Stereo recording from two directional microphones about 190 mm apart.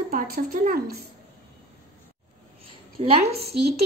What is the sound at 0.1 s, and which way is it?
Speech, 50° right (ahead or behind).